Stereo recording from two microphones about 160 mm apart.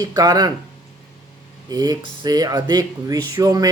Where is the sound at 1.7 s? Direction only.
25° right (ahead or behind).